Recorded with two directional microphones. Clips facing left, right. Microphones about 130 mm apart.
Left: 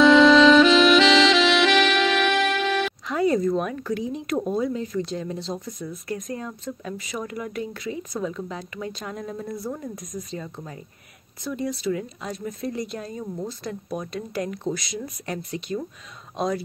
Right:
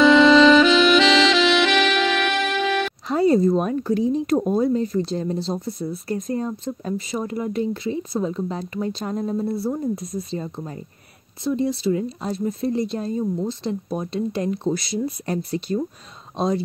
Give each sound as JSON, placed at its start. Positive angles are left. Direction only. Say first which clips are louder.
{"t": 0.0, "sound": "saxophone", "louder": "right 1 dB", "side_deg": 0}
{"t": 3.1, "sound": "speech", "louder": "right 5 dB", "side_deg": -30}